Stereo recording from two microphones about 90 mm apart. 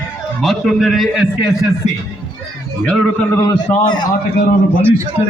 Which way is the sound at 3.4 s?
50° left (ahead or behind).